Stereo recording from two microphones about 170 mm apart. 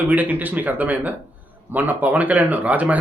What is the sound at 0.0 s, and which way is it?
Speech, 10° right (ahead or behind).